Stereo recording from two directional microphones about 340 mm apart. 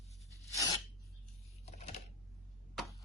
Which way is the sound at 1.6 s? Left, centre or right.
Centre.